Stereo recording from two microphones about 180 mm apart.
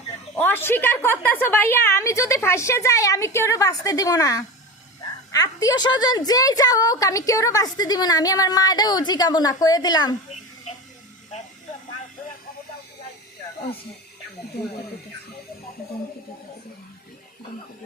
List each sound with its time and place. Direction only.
0.3 s a woman's voice: 10° left (ahead or behind)